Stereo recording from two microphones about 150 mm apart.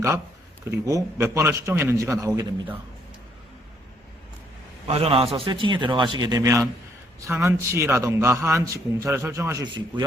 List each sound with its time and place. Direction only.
0.6 s a man's voice: 20° right (ahead or behind)
4.9 s a man's voice: 40° right (ahead or behind); by 9.6 s 20° right (ahead or behind)